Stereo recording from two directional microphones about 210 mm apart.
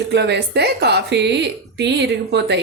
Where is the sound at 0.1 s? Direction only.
55° right (ahead or behind).